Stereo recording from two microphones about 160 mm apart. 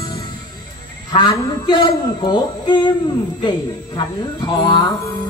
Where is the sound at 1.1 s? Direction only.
25° left (ahead or behind).